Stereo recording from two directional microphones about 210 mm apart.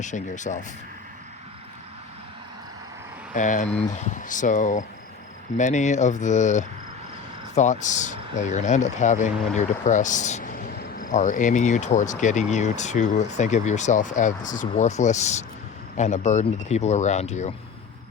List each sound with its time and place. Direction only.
0.0 s speech: 35° left (ahead or behind)
3.3 s speech: 35° left (ahead or behind)